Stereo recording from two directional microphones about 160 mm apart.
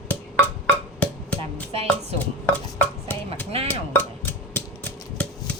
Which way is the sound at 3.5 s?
40° right (ahead or behind).